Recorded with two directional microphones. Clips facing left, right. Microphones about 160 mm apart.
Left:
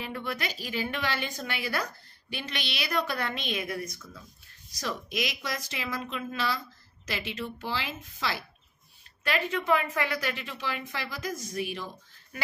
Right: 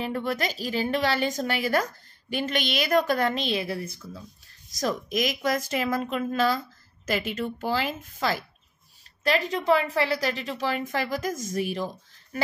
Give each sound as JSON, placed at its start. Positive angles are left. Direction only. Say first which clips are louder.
{"t": 0.0, "sound": "a woman's voice", "louder": "right 6 dB", "side_deg": -40}
{"t": 4.6, "sound": "a woman's voice", "louder": "right 7 dB", "side_deg": -45}